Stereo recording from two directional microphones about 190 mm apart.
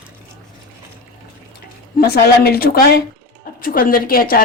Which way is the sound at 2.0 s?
55° left (ahead or behind).